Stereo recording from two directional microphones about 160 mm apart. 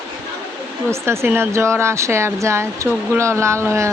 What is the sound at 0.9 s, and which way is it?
Speech, 15° right (ahead or behind).